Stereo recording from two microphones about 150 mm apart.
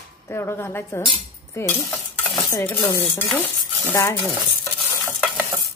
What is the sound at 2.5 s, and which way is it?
Speech, 15° left (ahead or behind).